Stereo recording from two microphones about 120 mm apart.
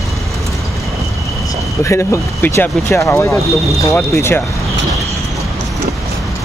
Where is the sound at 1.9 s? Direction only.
20° left (ahead or behind).